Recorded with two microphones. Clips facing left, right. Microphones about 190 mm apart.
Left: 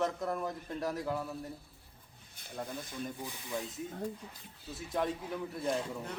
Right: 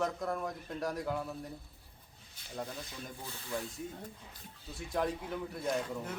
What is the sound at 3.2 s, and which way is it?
Speech, 15° left (ahead or behind).